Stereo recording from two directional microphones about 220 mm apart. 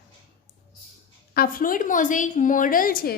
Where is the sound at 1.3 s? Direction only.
40° left (ahead or behind).